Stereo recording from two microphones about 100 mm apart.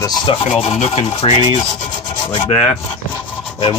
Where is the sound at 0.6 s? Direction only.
90° left.